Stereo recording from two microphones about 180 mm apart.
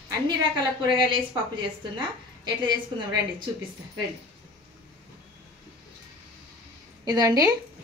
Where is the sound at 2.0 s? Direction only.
25° right (ahead or behind).